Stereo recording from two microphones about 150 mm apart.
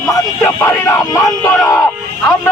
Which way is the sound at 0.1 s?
20° left (ahead or behind).